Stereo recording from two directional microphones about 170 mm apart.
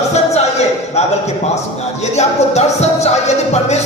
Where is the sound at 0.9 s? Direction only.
40° left (ahead or behind).